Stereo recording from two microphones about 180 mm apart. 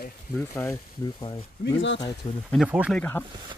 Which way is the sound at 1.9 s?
25° left (ahead or behind).